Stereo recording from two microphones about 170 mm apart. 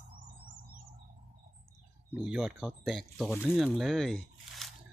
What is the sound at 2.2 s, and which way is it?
Speech, 5° right (ahead or behind).